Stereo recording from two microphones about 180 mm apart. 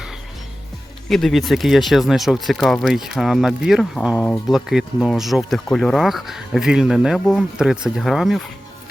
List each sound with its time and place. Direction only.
1.0 s speech: centre (ahead or behind)